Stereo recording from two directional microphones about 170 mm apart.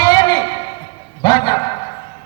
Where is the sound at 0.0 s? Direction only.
25° left (ahead or behind).